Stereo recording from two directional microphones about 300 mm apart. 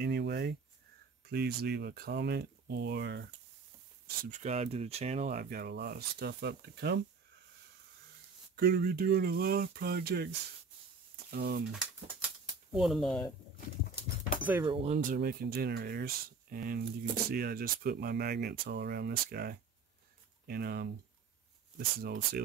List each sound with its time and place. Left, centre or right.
0.0 s a sound: right
1.3 s speech: right
4.2 s speech: right
8.5 s speech: right
12.7 s speech: centre
14.4 s speech: centre; by 22.4 s right